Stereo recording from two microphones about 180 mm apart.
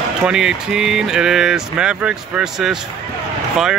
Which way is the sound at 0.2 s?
5° right (ahead or behind).